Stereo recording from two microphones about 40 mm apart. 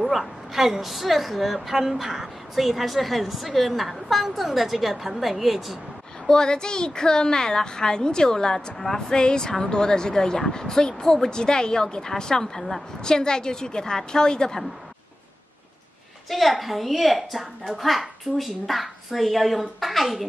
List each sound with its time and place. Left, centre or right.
0.0 s a woman's voice: centre
6.2 s speech: centre
8.7 s speech: centre
9.1 s a woman's voice: centre
16.3 s a woman's voice: centre